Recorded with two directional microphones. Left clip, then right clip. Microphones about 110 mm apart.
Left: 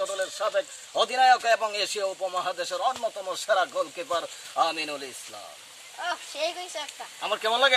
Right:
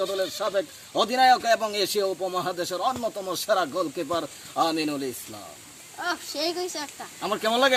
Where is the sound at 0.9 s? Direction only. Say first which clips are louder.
Right 1 dB; 30° right (ahead or behind).